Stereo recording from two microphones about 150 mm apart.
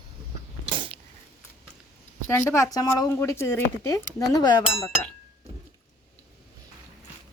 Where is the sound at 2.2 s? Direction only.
15° left (ahead or behind).